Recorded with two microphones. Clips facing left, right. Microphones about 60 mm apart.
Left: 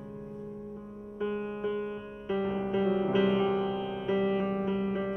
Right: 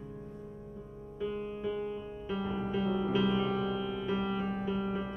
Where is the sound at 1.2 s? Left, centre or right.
Centre.